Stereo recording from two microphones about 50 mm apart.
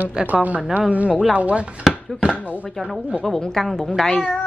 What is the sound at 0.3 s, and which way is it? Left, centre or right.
A woman's voice, right.